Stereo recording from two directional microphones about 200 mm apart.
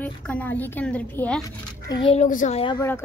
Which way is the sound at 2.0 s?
35° left (ahead or behind).